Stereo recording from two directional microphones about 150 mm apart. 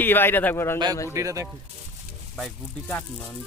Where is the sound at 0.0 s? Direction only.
15° left (ahead or behind).